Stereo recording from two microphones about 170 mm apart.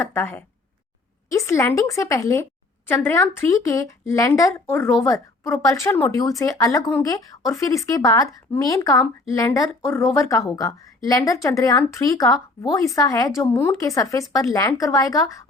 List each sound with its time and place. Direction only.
0.0 s a woman's voice: 15° left (ahead or behind)